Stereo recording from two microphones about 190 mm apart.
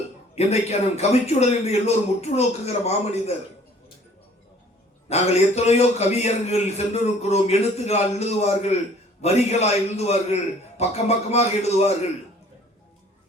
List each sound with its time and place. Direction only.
0.3 s a man's voice: 35° left (ahead or behind)
5.0 s a man's voice: 35° left (ahead or behind)